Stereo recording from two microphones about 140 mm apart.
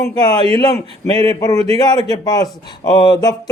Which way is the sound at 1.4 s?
25° left (ahead or behind).